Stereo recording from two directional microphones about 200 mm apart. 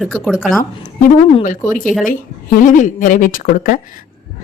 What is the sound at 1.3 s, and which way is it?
A woman's voice, 35° left (ahead or behind).